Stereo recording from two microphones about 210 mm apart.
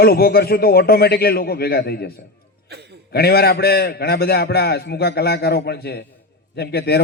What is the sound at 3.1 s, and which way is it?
A man's voice, 50° left (ahead or behind).